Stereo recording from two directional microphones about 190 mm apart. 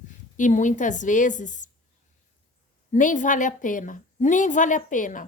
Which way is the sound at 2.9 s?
40° left (ahead or behind).